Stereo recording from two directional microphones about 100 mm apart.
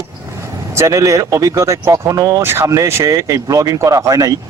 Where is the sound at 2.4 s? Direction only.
25° right (ahead or behind).